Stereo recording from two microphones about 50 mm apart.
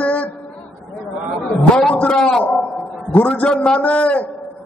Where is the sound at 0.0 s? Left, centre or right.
Left.